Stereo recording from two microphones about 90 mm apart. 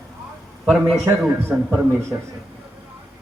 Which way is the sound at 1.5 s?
15° right (ahead or behind).